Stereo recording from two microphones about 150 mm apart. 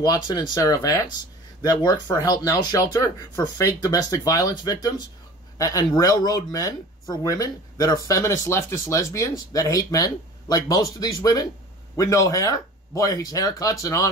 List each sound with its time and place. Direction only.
0.0 s speech: 30° left (ahead or behind)